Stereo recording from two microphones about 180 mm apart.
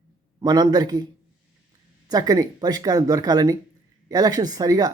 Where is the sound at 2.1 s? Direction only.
20° right (ahead or behind).